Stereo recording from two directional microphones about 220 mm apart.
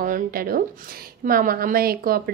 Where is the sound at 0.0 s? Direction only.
40° right (ahead or behind).